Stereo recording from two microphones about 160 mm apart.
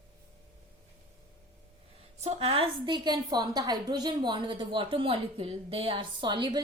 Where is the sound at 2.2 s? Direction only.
40° right (ahead or behind).